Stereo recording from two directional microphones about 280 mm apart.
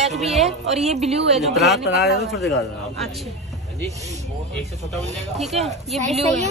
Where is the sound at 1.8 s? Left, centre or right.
Left.